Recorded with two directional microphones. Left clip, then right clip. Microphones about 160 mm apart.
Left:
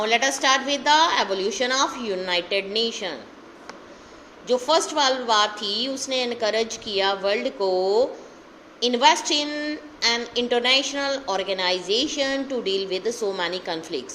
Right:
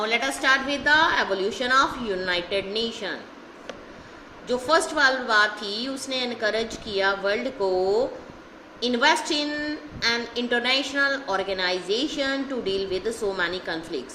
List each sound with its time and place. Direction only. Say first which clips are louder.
0.0 s a woman's voice: left 3 dB; 25° left (ahead or behind)
4.4 s a woman's voice: left 1 dB; 20° left (ahead or behind)